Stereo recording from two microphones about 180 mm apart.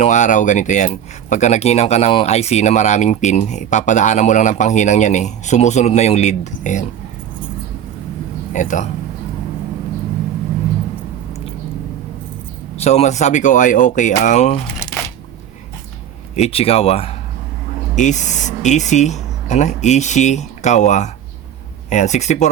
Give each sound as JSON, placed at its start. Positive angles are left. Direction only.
{"t": 0.0, "sound": "speech", "side_deg": 40}
{"t": 8.5, "sound": "speech", "side_deg": 45}
{"t": 12.7, "sound": "speech", "side_deg": 35}
{"t": 16.3, "sound": "speech", "side_deg": 35}